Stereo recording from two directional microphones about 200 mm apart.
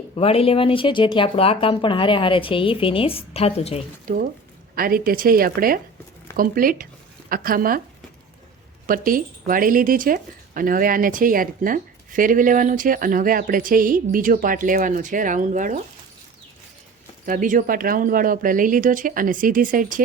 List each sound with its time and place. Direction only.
0.2 s speech: 30° left (ahead or behind)
4.0 s speech: 45° right (ahead or behind)
8.9 s speech: 45° right (ahead or behind)
17.2 s speech: 40° right (ahead or behind)